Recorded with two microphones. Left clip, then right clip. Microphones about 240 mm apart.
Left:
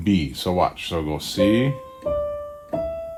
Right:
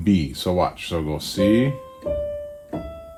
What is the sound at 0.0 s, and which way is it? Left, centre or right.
Speech, left.